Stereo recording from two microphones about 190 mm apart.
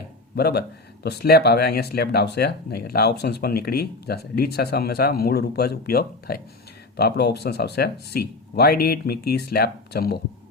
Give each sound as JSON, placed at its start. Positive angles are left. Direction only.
{"t": 0.3, "sound": "speech", "side_deg": 55}